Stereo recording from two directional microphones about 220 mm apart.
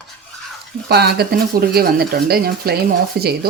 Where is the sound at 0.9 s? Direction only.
45° right (ahead or behind).